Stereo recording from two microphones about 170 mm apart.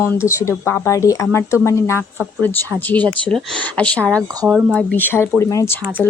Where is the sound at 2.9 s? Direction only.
5° left (ahead or behind).